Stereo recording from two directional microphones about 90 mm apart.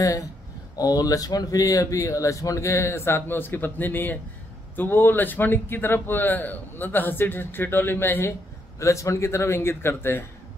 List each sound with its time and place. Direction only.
0.7 s a man's voice: 45° left (ahead or behind); by 10.2 s 25° left (ahead or behind)